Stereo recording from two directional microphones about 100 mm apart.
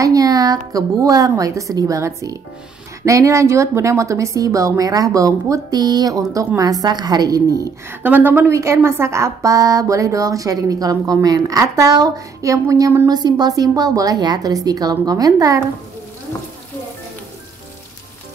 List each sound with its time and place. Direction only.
0.0 s a woman's voice: 35° right (ahead or behind)
8.0 s a woman's voice: 20° right (ahead or behind); by 15.6 s 35° right (ahead or behind)